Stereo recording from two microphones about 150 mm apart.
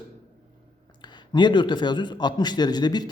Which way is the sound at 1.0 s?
30° left (ahead or behind).